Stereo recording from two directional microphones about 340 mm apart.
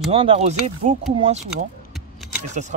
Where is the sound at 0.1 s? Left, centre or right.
Centre.